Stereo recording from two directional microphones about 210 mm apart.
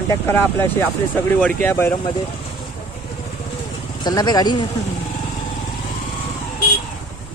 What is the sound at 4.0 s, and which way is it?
Speech, 20° left (ahead or behind).